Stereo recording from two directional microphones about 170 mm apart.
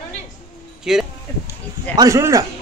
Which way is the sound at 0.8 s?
5° right (ahead or behind).